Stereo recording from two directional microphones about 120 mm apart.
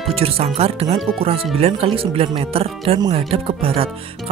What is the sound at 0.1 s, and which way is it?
Speech, 55° right (ahead or behind).